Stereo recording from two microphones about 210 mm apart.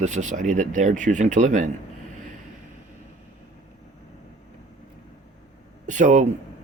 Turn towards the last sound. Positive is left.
turn(degrees=-35)  # may be behind; listen again after turning